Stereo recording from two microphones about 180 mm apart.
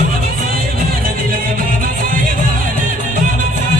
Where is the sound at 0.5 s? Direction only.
55° right (ahead or behind).